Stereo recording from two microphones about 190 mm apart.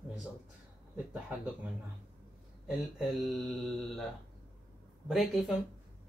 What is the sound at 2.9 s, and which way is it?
Mantra, centre (ahead or behind).